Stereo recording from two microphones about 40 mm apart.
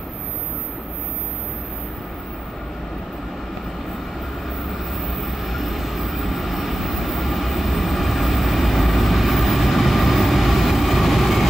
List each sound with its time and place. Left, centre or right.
4.6 s vehicle: centre